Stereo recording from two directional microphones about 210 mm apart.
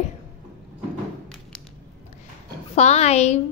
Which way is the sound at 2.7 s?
30° left (ahead or behind).